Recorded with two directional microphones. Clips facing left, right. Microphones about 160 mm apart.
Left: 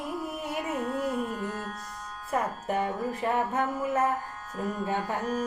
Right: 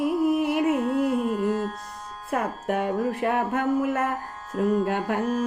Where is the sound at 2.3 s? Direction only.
70° right (ahead or behind).